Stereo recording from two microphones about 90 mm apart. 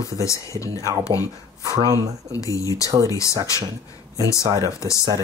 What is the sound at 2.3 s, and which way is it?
Speech, 40° left (ahead or behind).